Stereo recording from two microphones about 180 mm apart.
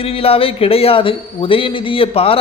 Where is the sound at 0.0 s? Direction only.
30° left (ahead or behind).